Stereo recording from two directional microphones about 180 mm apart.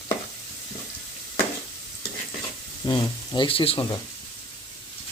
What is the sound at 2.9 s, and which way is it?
Speech, 25° left (ahead or behind).